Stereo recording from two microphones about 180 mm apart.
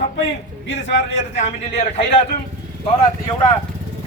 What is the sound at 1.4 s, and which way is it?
Speech, 35° left (ahead or behind).